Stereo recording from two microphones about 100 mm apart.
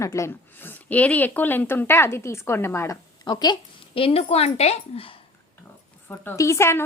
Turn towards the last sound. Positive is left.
turn(degrees=25)  # may be behind; listen again after turning